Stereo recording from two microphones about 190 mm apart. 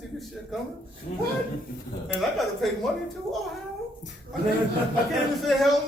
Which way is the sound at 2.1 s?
Centre (ahead or behind).